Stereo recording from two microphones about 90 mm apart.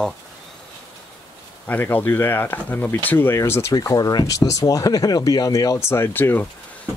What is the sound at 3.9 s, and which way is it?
Speech, 40° left (ahead or behind).